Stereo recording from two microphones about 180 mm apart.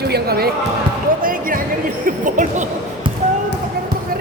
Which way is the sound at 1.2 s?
50° right (ahead or behind).